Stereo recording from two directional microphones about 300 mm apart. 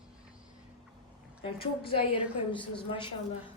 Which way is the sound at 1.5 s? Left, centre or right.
Centre.